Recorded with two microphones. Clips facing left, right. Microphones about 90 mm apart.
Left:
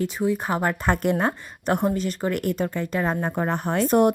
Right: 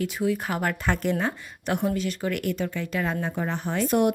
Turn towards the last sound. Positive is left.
turn(degrees=40)  # may be behind; listen again after turning